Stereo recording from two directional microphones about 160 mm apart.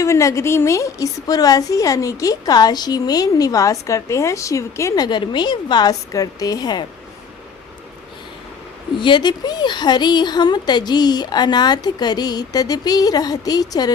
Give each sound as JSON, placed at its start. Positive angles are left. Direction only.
{"t": 0.0, "sound": "a woman's voice", "side_deg": 20}
{"t": 9.0, "sound": "a woman's voice", "side_deg": 30}